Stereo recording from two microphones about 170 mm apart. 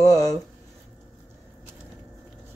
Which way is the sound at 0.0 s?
20° left (ahead or behind).